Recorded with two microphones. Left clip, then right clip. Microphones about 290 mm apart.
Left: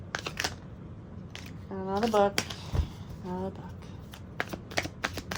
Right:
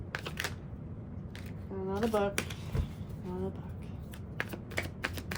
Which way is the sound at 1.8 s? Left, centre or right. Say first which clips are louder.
Left 6 dB; left.